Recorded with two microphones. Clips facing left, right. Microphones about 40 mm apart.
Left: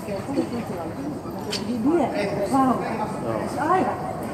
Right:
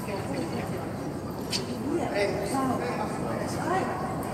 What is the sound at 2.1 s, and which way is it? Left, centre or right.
A man's voice, centre.